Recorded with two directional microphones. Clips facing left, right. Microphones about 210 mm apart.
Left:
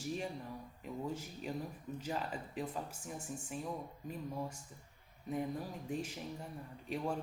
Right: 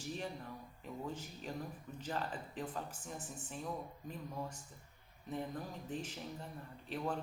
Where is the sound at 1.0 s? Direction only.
10° left (ahead or behind).